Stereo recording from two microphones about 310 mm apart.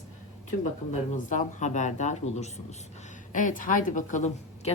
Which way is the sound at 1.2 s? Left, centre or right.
Left.